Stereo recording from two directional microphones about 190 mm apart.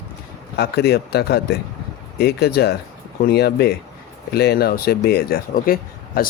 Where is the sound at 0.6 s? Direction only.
60° left (ahead or behind).